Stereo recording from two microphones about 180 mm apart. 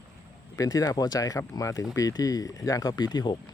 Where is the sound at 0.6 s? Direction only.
20° left (ahead or behind).